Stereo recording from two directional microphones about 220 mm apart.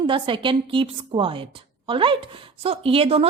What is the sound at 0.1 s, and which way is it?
A woman's voice, 20° right (ahead or behind).